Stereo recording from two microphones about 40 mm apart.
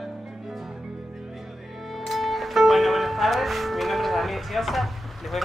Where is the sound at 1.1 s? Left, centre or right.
Centre.